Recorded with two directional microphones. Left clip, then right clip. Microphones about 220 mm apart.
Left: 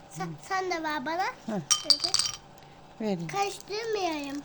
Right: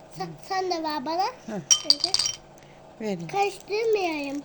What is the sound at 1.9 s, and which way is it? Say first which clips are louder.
Speech: right 2 dB; 10° right (ahead or behind).